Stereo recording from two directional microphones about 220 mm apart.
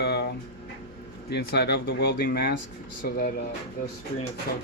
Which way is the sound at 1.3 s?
50° left (ahead or behind).